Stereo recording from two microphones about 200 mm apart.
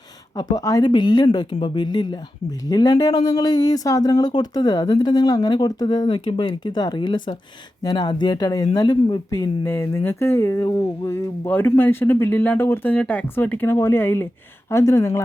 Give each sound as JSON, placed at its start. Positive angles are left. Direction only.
{"t": 0.5, "sound": "speech", "side_deg": 15}